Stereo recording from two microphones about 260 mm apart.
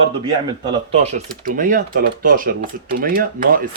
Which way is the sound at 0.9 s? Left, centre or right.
Right.